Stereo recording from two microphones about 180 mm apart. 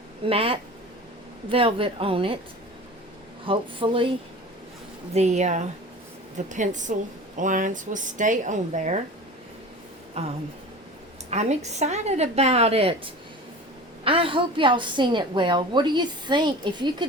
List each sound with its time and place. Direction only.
0.3 s speech: 30° right (ahead or behind)
3.4 s a woman's voice: 30° right (ahead or behind)
5.1 s a woman's voice: 40° right (ahead or behind)
10.2 s speech: 35° right (ahead or behind)
14.0 s a woman's voice: 30° right (ahead or behind)